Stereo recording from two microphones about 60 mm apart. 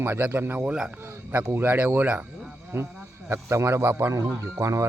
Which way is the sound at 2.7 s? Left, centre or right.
Right.